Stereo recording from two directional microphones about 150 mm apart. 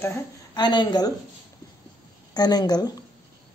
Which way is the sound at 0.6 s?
30° left (ahead or behind).